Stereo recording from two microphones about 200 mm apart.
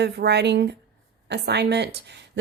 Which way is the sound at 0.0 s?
55° right (ahead or behind).